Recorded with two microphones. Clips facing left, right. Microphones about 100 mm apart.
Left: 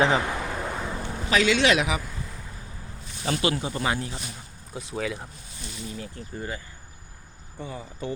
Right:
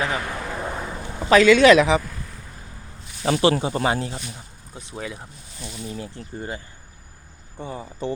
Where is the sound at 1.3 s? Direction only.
45° right (ahead or behind).